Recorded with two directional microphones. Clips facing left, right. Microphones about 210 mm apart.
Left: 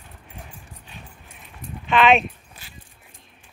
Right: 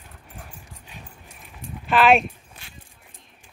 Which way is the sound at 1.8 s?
Centre (ahead or behind).